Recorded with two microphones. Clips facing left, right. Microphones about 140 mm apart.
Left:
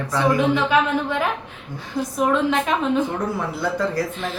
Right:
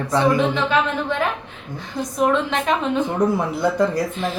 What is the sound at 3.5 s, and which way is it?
Speech, 20° right (ahead or behind).